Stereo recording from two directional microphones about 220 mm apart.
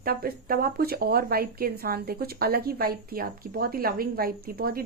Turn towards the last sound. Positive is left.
turn(degrees=-45)  # may be behind; listen again after turning